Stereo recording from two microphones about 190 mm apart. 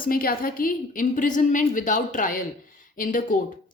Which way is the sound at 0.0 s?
50° left (ahead or behind).